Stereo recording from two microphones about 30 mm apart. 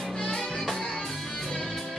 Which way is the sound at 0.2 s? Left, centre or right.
Centre.